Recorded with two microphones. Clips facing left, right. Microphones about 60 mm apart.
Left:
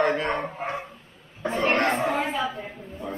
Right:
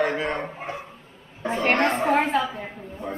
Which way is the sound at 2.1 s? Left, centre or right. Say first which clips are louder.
Right 5 dB; right.